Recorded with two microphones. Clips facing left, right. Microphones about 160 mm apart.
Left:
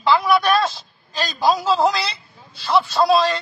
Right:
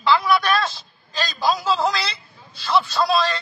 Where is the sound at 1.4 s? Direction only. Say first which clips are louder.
Left 4 dB; 35° left (ahead or behind).